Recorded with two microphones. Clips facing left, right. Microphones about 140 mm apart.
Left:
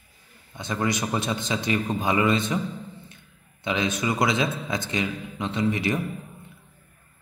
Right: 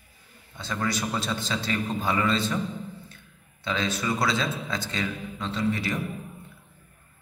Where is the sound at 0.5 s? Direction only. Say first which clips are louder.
Left 3 dB; 20° left (ahead or behind).